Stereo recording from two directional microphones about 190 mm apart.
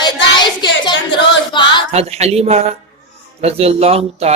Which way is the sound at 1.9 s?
35° right (ahead or behind).